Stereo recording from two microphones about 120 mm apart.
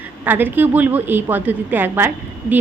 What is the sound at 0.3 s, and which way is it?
A woman's voice, 15° right (ahead or behind).